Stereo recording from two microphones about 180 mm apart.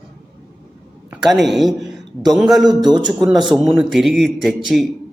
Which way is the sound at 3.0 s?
Centre (ahead or behind).